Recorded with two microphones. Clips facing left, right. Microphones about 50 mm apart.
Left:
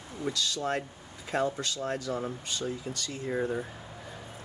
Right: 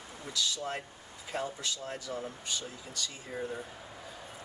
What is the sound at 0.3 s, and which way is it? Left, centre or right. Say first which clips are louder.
Speech: left 4 dB; left.